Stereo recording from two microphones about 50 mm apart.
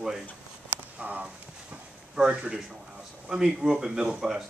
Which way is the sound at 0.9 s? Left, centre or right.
Right.